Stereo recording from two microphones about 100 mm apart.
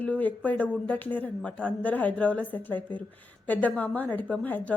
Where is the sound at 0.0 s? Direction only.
15° left (ahead or behind).